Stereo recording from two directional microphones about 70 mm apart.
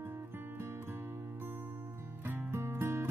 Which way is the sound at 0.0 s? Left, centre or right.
Right.